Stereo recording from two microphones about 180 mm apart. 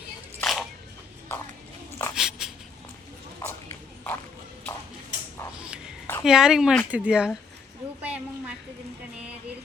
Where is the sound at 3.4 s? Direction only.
15° left (ahead or behind).